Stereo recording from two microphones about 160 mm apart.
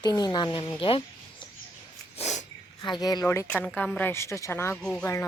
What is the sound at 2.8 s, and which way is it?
Speech, 25° left (ahead or behind).